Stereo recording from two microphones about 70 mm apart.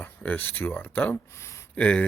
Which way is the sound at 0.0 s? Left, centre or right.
Left.